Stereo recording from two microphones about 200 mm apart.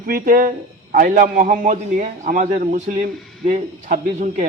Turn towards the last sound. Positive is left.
turn(degrees=-40)  # may be behind; listen again after turning